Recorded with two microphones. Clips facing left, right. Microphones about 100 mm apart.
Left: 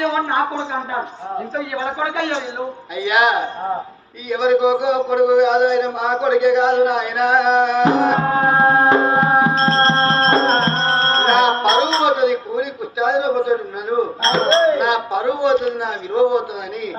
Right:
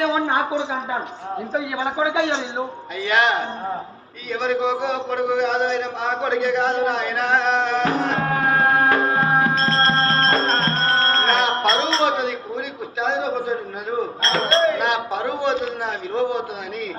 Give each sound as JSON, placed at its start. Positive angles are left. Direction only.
{"t": 0.1, "sound": "a man's voice", "side_deg": -15}
{"t": 3.0, "sound": "a man's voice", "side_deg": 10}
{"t": 11.0, "sound": "music", "side_deg": 25}
{"t": 11.3, "sound": "a sound", "side_deg": 5}
{"t": 14.3, "sound": "speech", "side_deg": 25}
{"t": 14.8, "sound": "a man's voice", "side_deg": 5}